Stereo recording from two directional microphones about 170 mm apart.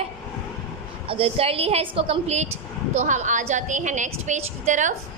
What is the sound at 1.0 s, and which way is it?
A woman's voice, 35° right (ahead or behind).